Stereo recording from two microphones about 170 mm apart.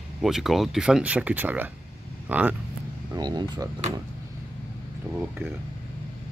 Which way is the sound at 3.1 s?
25° right (ahead or behind).